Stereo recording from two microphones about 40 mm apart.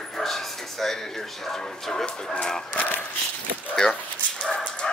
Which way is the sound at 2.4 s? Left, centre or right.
Centre.